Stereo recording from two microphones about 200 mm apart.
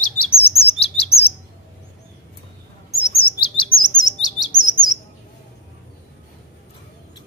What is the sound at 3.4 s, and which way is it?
Chirp, 25° left (ahead or behind).